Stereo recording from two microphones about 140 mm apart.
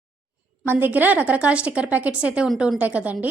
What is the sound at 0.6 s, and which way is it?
A woman's voice, 15° right (ahead or behind).